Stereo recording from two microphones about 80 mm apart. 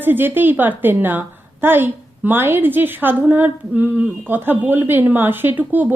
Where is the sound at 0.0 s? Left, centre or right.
Right.